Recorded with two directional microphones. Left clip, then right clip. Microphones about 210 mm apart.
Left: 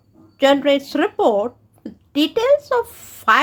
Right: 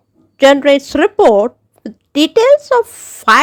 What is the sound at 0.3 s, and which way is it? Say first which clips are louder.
Speech: right 7 dB; 35° right (ahead or behind).